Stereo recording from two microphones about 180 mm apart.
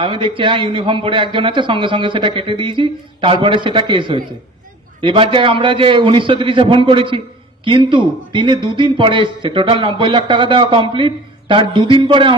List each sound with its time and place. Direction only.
0.0 s speech: 30° right (ahead or behind)